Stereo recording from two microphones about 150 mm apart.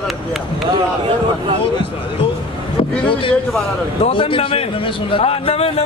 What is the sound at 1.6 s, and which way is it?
Speech, 35° left (ahead or behind).